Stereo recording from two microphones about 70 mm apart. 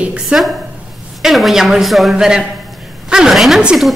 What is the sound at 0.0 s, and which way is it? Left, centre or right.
Speech, centre.